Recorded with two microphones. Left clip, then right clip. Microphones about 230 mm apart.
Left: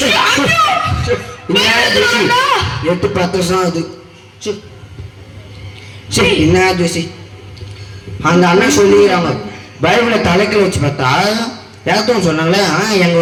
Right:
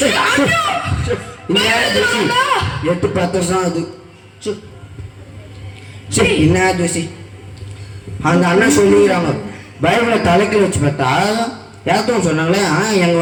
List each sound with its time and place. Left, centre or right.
0.0 s a sound: left
6.1 s a woman's voice: centre
8.2 s a man's voice: left
9.0 s a woman's voice: centre